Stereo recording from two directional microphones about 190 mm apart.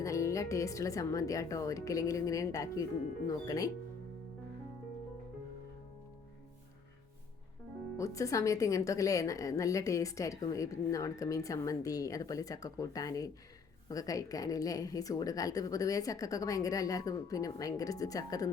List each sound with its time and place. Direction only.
0.0 s a woman's voice: 15° left (ahead or behind)
7.9 s a woman's voice: 15° left (ahead or behind)